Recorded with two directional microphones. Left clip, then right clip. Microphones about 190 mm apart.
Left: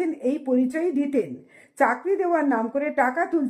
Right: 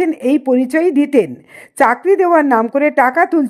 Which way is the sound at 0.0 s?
40° right (ahead or behind).